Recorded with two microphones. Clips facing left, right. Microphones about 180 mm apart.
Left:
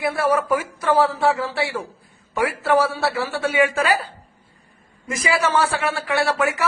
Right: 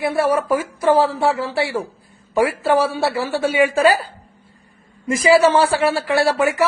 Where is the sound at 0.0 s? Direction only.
25° right (ahead or behind).